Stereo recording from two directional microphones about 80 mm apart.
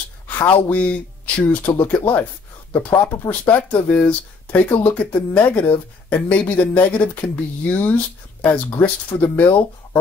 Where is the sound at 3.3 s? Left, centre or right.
Centre.